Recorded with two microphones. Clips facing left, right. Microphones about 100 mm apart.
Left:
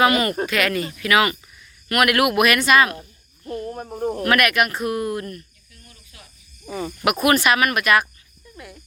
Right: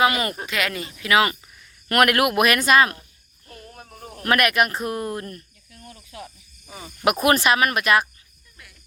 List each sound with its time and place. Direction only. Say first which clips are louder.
0.0 s speech: left 3 dB; 20° right (ahead or behind)
1.9 s speech: even; 40° right (ahead or behind)
2.9 s cricket: left 7 dB; 25° left (ahead or behind)
4.3 s speech: right 1 dB; 30° right (ahead or behind)
5.9 s snake: right 12 dB; 55° right (ahead or behind)
6.7 s cricket: left 12 dB; 80° left
7.0 s speech: even; 35° right (ahead or behind)
8.5 s speech: left 11 dB; 30° left (ahead or behind)